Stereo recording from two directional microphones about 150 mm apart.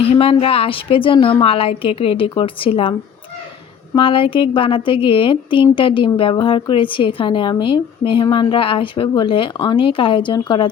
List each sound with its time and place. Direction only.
0.1 s a woman's voice: 40° left (ahead or behind)
3.9 s a woman's voice: 35° left (ahead or behind)